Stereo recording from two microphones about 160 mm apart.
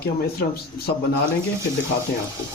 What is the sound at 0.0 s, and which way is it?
Speech, 75° left (ahead or behind).